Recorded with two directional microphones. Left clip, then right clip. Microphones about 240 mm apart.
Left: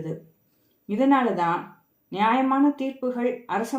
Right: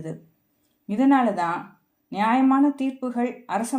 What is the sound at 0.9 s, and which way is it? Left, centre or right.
Speech, right.